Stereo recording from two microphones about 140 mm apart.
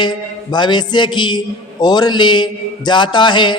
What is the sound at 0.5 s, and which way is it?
A man's voice, 30° left (ahead or behind).